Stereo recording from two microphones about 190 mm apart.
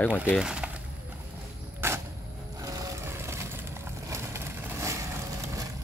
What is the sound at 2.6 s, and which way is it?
Vehicle, 20° right (ahead or behind).